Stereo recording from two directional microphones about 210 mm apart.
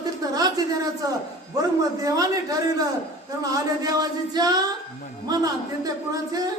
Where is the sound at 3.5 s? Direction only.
20° right (ahead or behind).